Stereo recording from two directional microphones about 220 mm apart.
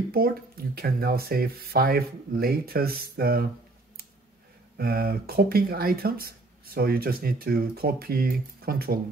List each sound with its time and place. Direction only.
0.1 s speech: 45° right (ahead or behind)
4.7 s speech: 45° right (ahead or behind)